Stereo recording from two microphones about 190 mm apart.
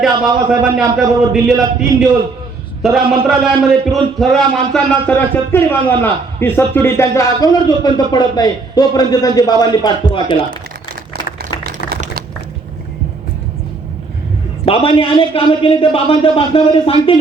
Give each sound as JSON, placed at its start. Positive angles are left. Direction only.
{"t": 0.0, "sound": "a man's voice", "side_deg": -5}
{"t": 14.6, "sound": "a man's voice", "side_deg": 30}